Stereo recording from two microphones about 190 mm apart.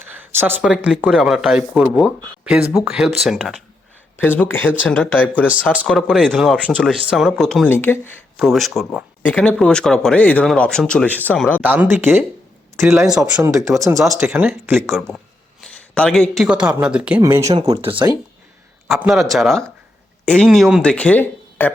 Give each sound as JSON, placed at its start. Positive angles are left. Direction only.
{"t": 0.1, "sound": "a sound", "side_deg": -10}
{"t": 0.6, "sound": "speech", "side_deg": -5}
{"t": 4.2, "sound": "speech", "side_deg": 10}
{"t": 8.4, "sound": "speech", "side_deg": 0}
{"t": 11.6, "sound": "speech", "side_deg": -10}
{"t": 13.5, "sound": "speech", "side_deg": -15}
{"t": 14.8, "sound": "speech", "side_deg": 0}
{"t": 17.2, "sound": "speech", "side_deg": -15}
{"t": 18.9, "sound": "speech", "side_deg": 0}